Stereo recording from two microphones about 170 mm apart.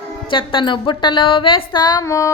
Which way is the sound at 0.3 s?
30° left (ahead or behind).